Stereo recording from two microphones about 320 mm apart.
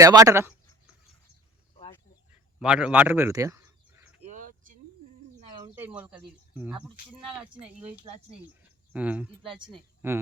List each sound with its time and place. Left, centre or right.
0.0 s speech: centre
2.6 s a man's voice: centre
4.3 s a sound: right
5.5 s speech: centre
8.6 s a sound: centre
9.5 s speech: centre